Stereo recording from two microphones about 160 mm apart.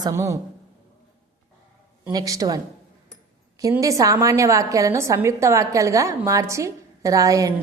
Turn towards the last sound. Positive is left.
turn(degrees=-20)  # may be behind; listen again after turning